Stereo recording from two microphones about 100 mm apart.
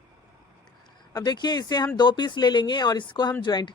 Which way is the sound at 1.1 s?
40° left (ahead or behind).